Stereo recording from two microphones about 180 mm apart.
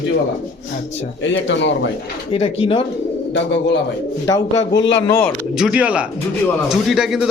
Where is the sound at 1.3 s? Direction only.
90° left.